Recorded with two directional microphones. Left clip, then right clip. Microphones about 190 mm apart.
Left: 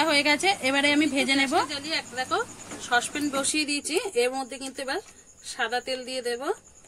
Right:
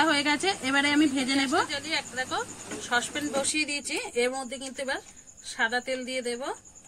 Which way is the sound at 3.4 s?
55° left (ahead or behind).